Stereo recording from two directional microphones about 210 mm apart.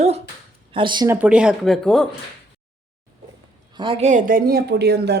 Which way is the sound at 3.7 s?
25° right (ahead or behind).